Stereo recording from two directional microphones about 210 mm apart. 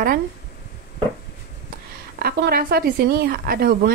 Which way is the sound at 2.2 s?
45° right (ahead or behind).